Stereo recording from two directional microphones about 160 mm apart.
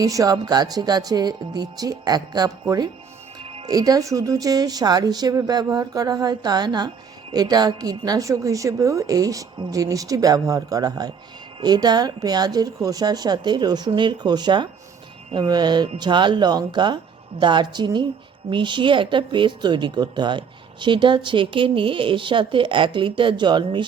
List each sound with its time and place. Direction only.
0.0 s a woman's voice: 20° right (ahead or behind)